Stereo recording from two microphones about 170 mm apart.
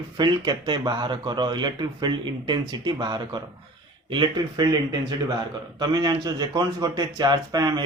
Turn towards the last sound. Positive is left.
turn(degrees=-25)  # may be behind; listen again after turning